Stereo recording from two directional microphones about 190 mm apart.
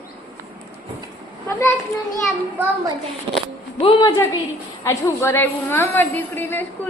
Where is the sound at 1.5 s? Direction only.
15° left (ahead or behind).